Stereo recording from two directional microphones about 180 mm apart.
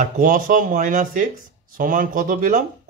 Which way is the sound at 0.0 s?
45° right (ahead or behind).